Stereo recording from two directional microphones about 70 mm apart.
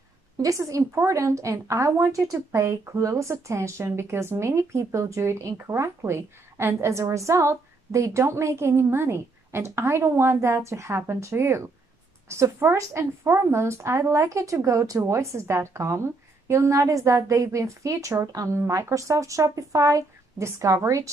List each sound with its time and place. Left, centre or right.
0.4 s a woman's voice: right